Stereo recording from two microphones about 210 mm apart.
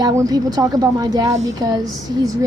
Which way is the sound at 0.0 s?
20° right (ahead or behind).